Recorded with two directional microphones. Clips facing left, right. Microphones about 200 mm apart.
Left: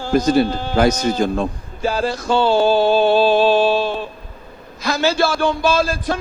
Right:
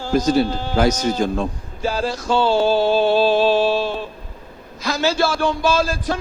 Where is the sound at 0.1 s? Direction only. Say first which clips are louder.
Left 2 dB; 60° left (ahead or behind).